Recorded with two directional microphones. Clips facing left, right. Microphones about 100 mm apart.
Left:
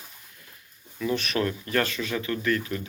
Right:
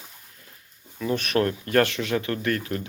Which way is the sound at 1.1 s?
55° right (ahead or behind).